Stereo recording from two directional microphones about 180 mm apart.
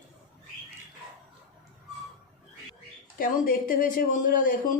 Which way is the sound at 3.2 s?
55° left (ahead or behind).